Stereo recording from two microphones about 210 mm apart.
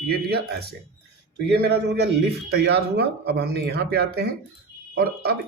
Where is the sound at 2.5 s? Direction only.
50° right (ahead or behind).